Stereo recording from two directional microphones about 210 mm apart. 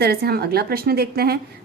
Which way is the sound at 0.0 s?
50° right (ahead or behind).